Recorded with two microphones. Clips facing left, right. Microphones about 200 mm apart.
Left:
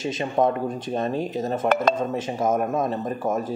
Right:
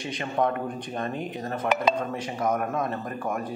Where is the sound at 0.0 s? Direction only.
20° left (ahead or behind).